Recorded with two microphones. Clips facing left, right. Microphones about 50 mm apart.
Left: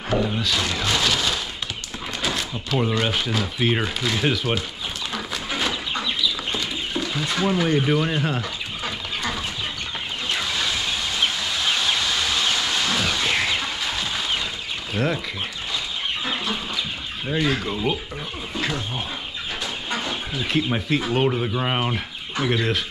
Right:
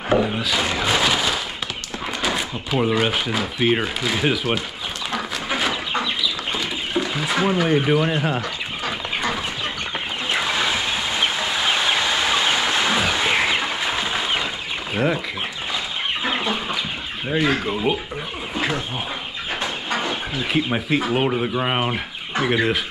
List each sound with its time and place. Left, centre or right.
0.4 s speech: centre
6.5 s a sound: centre
7.5 s speech: centre
8.8 s chicken: centre
10.3 s train: right
15.0 s speech: centre
16.3 s chicken: right
17.3 s speech: centre
20.5 s speech: centre